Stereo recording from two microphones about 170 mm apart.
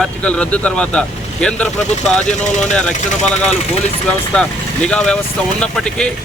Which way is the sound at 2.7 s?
5° left (ahead or behind).